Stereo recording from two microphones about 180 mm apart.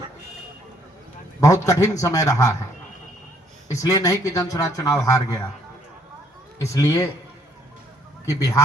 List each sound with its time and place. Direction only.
1.4 s speech: 20° left (ahead or behind)
3.7 s speech: 20° left (ahead or behind)
6.6 s a man's voice: 20° left (ahead or behind)
8.4 s speech: 20° left (ahead or behind)